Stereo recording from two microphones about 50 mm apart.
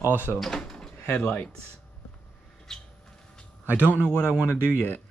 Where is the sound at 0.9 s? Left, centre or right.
Left.